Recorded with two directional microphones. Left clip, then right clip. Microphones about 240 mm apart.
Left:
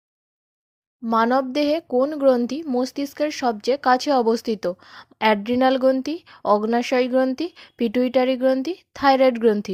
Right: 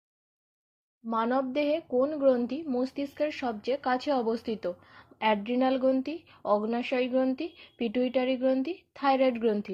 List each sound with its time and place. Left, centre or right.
1.0 s speech: left